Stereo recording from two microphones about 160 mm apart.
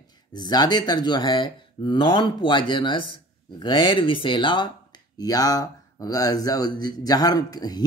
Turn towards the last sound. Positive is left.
turn(degrees=25)  # may be behind; listen again after turning